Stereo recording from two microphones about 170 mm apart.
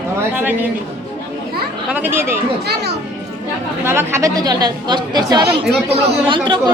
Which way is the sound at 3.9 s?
15° right (ahead or behind).